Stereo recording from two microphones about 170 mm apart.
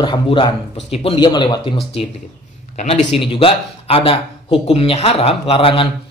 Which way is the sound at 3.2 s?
30° left (ahead or behind).